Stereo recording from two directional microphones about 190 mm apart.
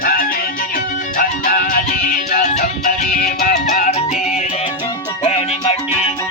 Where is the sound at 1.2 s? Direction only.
50° left (ahead or behind).